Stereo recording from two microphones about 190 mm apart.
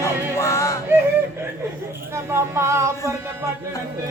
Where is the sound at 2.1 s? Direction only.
15° right (ahead or behind).